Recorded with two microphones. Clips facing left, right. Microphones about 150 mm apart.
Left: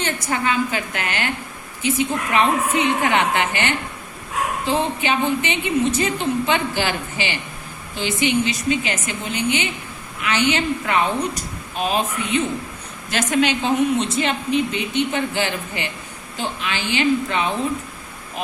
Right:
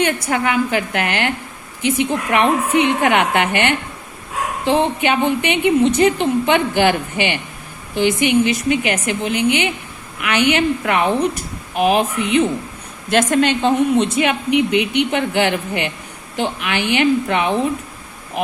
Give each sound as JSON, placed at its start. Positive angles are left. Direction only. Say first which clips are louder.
{"t": 0.3, "sound": "a woman's voice", "louder": "right 4 dB", "side_deg": -65}
{"t": 13.1, "sound": "a woman's voice", "louder": "right 4 dB", "side_deg": -50}
{"t": 14.0, "sound": "a woman's voice", "louder": "right 4 dB", "side_deg": -65}